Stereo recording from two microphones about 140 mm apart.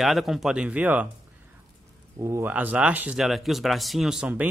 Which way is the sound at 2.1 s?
20° right (ahead or behind).